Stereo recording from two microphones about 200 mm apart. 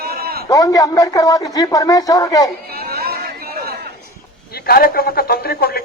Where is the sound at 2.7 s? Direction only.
50° right (ahead or behind).